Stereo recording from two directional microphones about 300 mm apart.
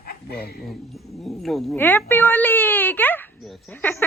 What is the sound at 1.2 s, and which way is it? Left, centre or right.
Speech, centre.